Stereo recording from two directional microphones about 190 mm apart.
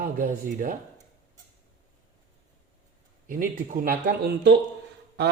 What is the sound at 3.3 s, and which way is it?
A woman's voice, 45° right (ahead or behind).